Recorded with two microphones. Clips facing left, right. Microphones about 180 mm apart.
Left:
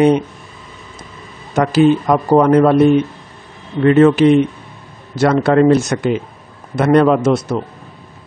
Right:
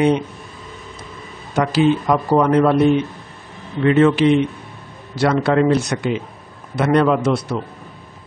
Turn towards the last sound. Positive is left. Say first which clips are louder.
# left 4 dB
turn(degrees=45)  # may be behind; listen again after turning